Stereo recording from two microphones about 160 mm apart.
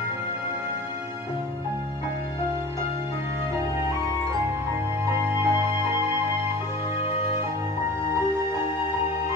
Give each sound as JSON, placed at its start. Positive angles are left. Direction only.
{"t": 5.0, "sound": "music", "side_deg": -15}